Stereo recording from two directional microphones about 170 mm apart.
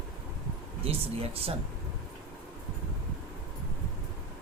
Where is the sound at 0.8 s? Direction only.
35° right (ahead or behind).